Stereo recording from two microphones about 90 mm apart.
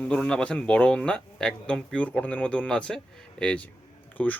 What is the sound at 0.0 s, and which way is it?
Speech, 10° left (ahead or behind).